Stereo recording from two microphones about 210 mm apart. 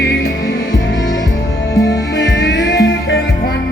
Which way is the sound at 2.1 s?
55° left (ahead or behind).